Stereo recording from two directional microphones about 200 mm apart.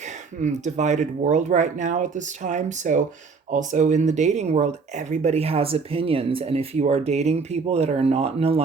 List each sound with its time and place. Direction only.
0.4 s speech: 35° right (ahead or behind)